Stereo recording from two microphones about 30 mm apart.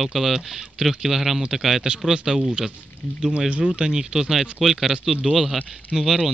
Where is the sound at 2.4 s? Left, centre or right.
Right.